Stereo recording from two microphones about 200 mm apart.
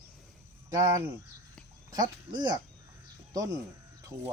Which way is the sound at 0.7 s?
20° right (ahead or behind).